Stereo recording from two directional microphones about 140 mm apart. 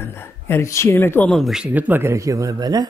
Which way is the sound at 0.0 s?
15° left (ahead or behind).